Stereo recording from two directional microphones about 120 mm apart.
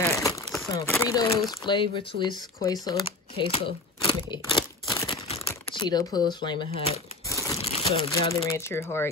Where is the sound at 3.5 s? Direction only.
50° left (ahead or behind).